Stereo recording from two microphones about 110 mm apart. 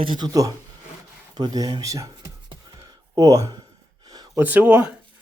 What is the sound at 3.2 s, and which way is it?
Speech, 35° right (ahead or behind).